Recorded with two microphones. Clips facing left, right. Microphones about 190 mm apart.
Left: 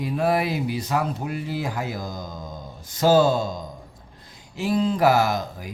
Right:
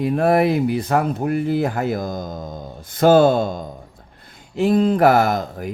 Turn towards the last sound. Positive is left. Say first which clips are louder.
# right 4 dB
turn(degrees=-55)  # may be behind; listen again after turning